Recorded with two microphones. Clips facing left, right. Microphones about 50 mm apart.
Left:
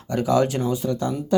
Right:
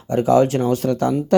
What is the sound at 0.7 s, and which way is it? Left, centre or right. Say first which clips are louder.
Speech: right 5 dB; right.